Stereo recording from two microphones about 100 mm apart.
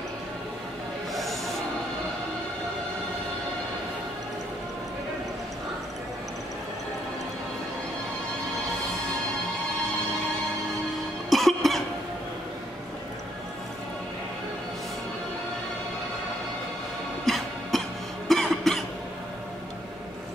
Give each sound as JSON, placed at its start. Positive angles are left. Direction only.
{"t": 1.1, "sound": "music", "side_deg": 0}
{"t": 11.2, "sound": "cough", "side_deg": 0}
{"t": 17.3, "sound": "music", "side_deg": 0}
{"t": 18.3, "sound": "cough", "side_deg": 5}